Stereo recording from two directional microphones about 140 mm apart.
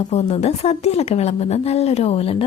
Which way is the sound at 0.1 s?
50° left (ahead or behind).